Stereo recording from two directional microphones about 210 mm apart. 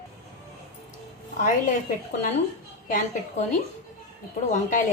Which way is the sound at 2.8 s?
40° left (ahead or behind).